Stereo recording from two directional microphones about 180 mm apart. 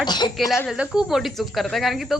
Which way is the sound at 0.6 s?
5° right (ahead or behind).